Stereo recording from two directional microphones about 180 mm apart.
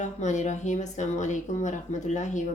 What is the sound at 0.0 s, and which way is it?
Speech, 40° left (ahead or behind).